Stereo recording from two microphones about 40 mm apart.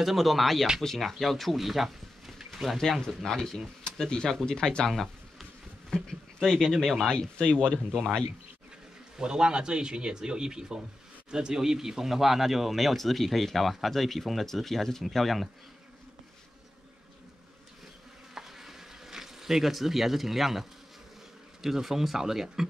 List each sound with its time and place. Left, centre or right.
0.0 s speech: centre
3.3 s speech: centre
4.8 s speech: centre
7.1 s speech: left
9.2 s speech: centre
18.3 s a sound: centre
21.6 s speech: centre